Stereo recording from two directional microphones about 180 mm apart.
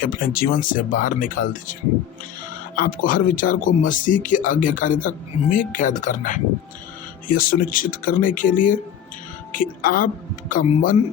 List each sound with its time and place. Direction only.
0.0 s speech: 50° left (ahead or behind)
2.7 s speech: 50° left (ahead or behind)